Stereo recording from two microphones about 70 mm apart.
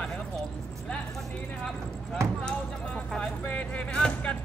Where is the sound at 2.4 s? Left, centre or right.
Centre.